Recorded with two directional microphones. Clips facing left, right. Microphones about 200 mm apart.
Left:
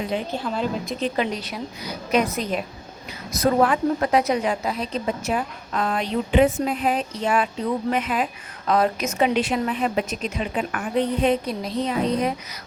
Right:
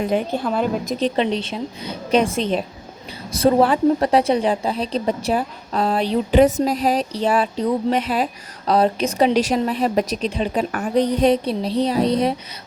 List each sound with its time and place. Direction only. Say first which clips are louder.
0.0 s a woman's voice: right 5 dB; 55° right (ahead or behind)
0.9 s a woman's voice: right 6 dB; 30° right (ahead or behind)